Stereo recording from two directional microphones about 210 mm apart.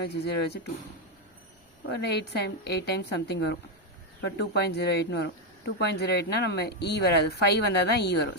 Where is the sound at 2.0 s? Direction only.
55° left (ahead or behind).